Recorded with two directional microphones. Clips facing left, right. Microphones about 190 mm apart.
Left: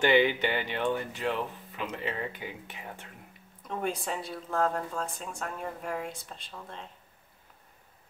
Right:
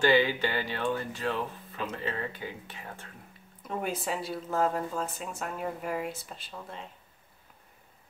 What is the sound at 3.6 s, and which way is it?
Speech, 5° right (ahead or behind).